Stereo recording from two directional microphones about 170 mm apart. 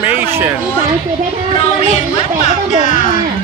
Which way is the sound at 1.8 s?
35° left (ahead or behind).